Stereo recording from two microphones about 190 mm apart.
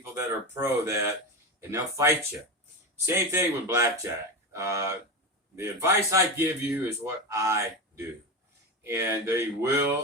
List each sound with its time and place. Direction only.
0.1 s speech: 15° right (ahead or behind)